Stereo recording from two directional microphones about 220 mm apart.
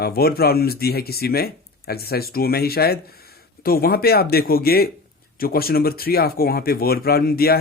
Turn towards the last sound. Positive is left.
turn(degrees=45)  # may be behind; listen again after turning